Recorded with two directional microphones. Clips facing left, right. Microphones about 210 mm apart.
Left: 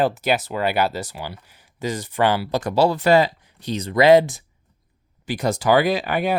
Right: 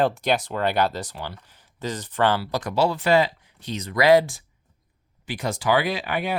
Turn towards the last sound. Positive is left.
turn(degrees=40)  # may be behind; listen again after turning